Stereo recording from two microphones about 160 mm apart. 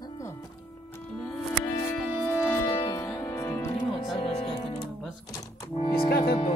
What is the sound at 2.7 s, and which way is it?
Music, 25° left (ahead or behind).